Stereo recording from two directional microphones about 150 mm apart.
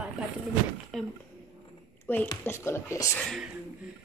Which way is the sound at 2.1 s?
15° left (ahead or behind).